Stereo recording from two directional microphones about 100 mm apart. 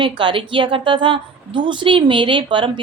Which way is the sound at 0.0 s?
55° right (ahead or behind).